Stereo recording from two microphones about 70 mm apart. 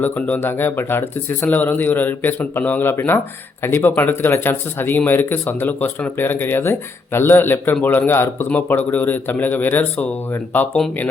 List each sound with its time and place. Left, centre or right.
0.0 s speech: centre
0.4 s speech: left